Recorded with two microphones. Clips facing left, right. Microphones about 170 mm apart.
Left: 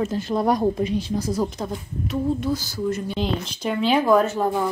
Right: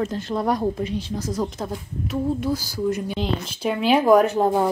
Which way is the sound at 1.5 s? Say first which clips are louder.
Even; 5° right (ahead or behind).